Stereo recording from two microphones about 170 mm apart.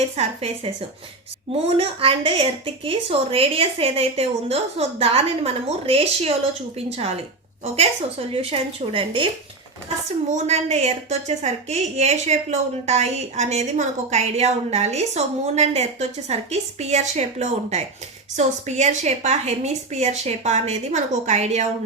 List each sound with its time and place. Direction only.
0.2 s a woman's voice: 40° right (ahead or behind)
1.7 s a woman's voice: 35° right (ahead or behind)
8.3 s a woman's voice: 35° right (ahead or behind)
10.2 s a woman's voice: 40° right (ahead or behind)